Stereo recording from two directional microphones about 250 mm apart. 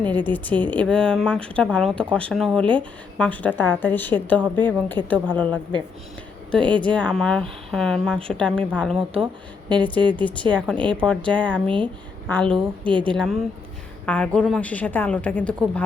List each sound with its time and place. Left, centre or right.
0.0 s a woman's voice: centre
9.2 s a woman's voice: centre
10.2 s speech: centre
14.0 s speech: centre